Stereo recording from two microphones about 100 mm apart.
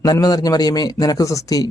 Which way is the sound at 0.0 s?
40° left (ahead or behind).